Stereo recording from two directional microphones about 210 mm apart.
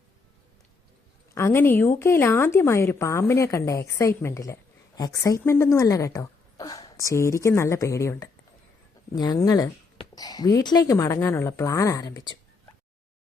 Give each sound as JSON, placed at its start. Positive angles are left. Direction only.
{"t": 1.4, "sound": "a woman's voice", "side_deg": 10}